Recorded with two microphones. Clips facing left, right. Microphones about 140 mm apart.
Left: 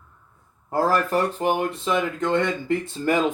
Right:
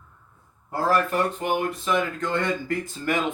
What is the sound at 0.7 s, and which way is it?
Speech, 35° left (ahead or behind).